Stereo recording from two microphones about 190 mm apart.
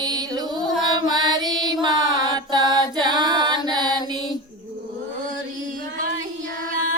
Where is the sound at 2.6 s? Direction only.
20° left (ahead or behind).